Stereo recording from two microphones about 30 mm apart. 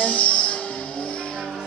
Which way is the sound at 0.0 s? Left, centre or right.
Left.